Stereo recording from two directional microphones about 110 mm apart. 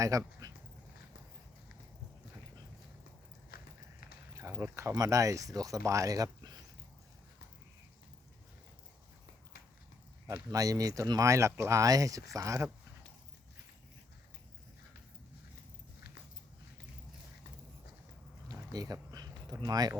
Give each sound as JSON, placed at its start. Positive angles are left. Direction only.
{"t": 0.0, "sound": "speech", "side_deg": -30}
{"t": 4.4, "sound": "speech", "side_deg": -25}
{"t": 10.5, "sound": "speech", "side_deg": -30}
{"t": 18.4, "sound": "a sound", "side_deg": -35}